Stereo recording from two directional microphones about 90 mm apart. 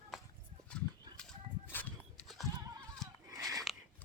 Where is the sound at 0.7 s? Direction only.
10° left (ahead or behind).